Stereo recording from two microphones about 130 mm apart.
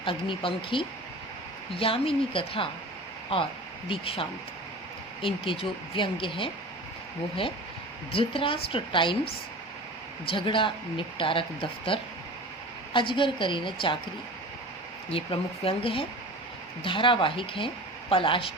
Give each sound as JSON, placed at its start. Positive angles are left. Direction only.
{"t": 0.0, "sound": "a woman's voice", "side_deg": 40}
{"t": 3.8, "sound": "a woman's voice", "side_deg": 45}
{"t": 8.1, "sound": "a woman's voice", "side_deg": 45}
{"t": 10.2, "sound": "speech", "side_deg": 40}
{"t": 15.1, "sound": "a woman's voice", "side_deg": 45}